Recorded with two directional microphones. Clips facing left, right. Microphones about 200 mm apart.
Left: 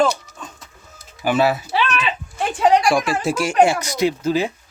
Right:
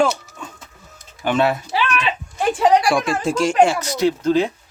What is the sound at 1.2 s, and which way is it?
Speech, 5° left (ahead or behind).